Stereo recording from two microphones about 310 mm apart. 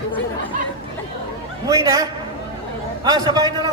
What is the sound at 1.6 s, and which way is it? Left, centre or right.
A man's voice, centre.